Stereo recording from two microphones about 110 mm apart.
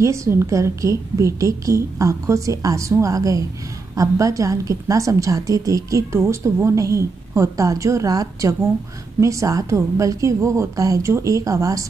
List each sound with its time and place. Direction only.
0.0 s a woman's voice: 25° right (ahead or behind)